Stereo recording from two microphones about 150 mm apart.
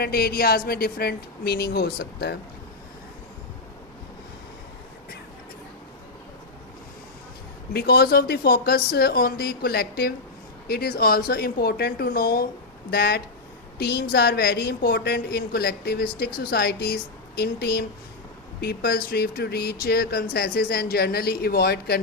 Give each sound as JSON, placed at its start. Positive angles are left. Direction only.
{"t": 0.0, "sound": "speech", "side_deg": 90}
{"t": 7.7, "sound": "speech", "side_deg": 90}